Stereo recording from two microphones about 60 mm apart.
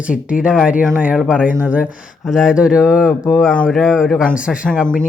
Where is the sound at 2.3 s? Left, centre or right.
Centre.